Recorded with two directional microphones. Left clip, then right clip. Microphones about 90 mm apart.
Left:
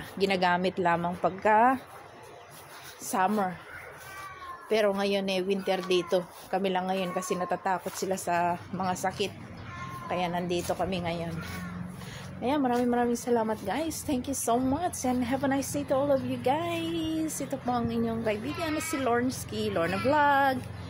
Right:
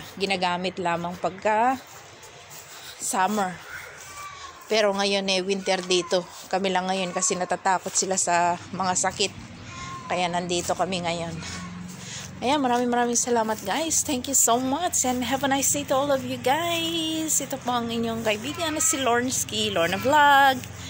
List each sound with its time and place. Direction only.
0.2 s speech: 45° left (ahead or behind)
0.8 s speech: 35° left (ahead or behind)
3.2 s a woman's voice: 10° right (ahead or behind)
4.6 s a woman's voice: centre (ahead or behind)
12.4 s speech: 20° right (ahead or behind)
12.7 s a woman's voice: 5° right (ahead or behind)
14.6 s a woman's voice: centre (ahead or behind)